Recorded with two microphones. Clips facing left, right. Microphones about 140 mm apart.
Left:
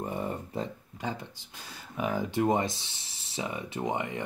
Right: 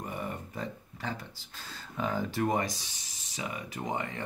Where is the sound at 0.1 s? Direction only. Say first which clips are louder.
Left 4 dB; 30° left (ahead or behind).